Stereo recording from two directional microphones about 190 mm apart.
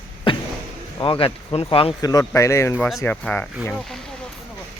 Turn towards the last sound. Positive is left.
turn(degrees=0)  # may be behind; listen again after turning